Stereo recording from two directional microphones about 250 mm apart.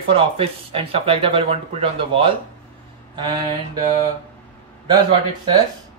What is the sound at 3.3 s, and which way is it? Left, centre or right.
Mantra, centre.